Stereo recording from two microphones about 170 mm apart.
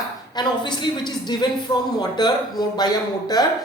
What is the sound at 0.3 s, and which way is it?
A man's voice, 25° left (ahead or behind).